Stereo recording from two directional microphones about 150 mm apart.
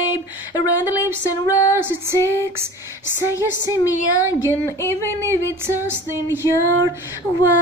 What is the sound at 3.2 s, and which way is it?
Female singing, 20° left (ahead or behind).